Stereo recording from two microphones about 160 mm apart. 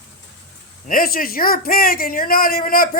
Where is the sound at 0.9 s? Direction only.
65° left (ahead or behind).